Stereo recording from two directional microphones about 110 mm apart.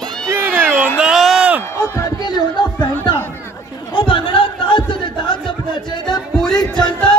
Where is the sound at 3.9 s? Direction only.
50° left (ahead or behind).